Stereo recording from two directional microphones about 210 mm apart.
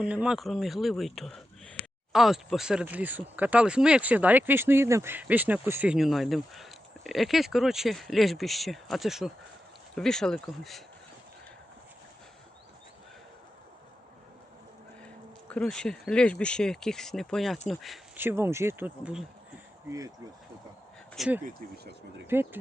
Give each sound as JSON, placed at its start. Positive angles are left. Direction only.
{"t": 0.0, "sound": "speech", "side_deg": -5}
{"t": 15.4, "sound": "speech", "side_deg": 5}
{"t": 21.2, "sound": "speech", "side_deg": -5}